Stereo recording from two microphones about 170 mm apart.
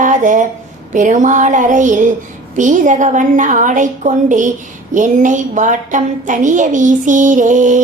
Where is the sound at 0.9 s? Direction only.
50° right (ahead or behind).